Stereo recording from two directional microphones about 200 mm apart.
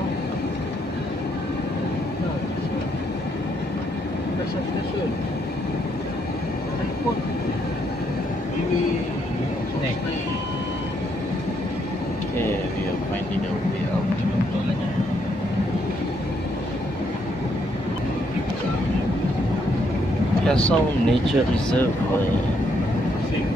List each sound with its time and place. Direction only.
20.4 s speech: 5° left (ahead or behind)